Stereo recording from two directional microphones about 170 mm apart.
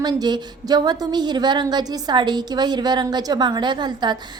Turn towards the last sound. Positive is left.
turn(degrees=-25)  # may be behind; listen again after turning